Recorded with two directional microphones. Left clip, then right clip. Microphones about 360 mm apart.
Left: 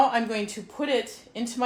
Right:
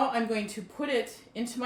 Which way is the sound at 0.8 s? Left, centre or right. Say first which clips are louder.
Left 5 dB; centre.